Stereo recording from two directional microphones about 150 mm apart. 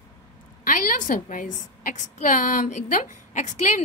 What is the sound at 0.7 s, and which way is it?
A woman's voice, 60° left (ahead or behind).